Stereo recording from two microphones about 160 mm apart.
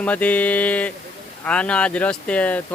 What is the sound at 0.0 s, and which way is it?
Speech, 10° left (ahead or behind).